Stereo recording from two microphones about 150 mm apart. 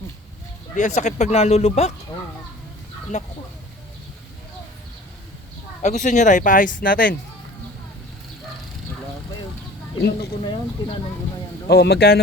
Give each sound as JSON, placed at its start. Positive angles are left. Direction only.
{"t": 0.8, "sound": "speech", "side_deg": 50}
{"t": 3.1, "sound": "speech", "side_deg": 50}
{"t": 5.8, "sound": "speech", "side_deg": 55}
{"t": 10.4, "sound": "speech", "side_deg": 35}
{"t": 11.7, "sound": "speech", "side_deg": 90}